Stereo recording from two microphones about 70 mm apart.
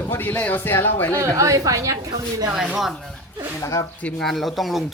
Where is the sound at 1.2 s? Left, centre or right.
Right.